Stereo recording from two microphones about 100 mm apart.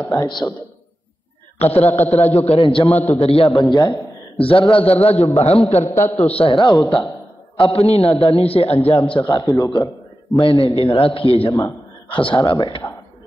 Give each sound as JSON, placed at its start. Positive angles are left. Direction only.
{"t": 0.1, "sound": "speech", "side_deg": 40}
{"t": 1.6, "sound": "a man's voice", "side_deg": 90}
{"t": 3.6, "sound": "a man's voice", "side_deg": 35}
{"t": 4.5, "sound": "a man's voice", "side_deg": 60}
{"t": 5.9, "sound": "a man's voice", "side_deg": 30}
{"t": 6.2, "sound": "a man's voice", "side_deg": 80}
{"t": 6.8, "sound": "speech", "side_deg": 35}
{"t": 7.5, "sound": "a man's voice", "side_deg": 80}
{"t": 9.2, "sound": "speech", "side_deg": 35}
{"t": 10.5, "sound": "a man's voice", "side_deg": -35}
{"t": 10.9, "sound": "a man's voice", "side_deg": 80}
{"t": 12.1, "sound": "speech", "side_deg": 55}